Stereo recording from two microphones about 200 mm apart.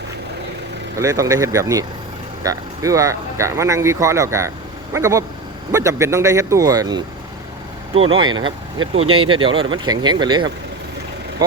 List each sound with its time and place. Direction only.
0.9 s speech: 15° right (ahead or behind)
7.9 s speech: 90° right
8.2 s speech: 20° right (ahead or behind)
8.4 s speech: 85° right
9.0 s speech: 25° right (ahead or behind)